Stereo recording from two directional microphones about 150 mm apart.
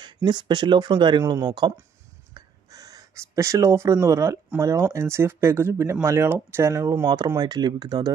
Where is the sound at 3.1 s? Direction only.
20° right (ahead or behind).